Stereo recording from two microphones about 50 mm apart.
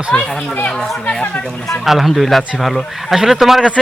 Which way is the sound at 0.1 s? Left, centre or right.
Centre.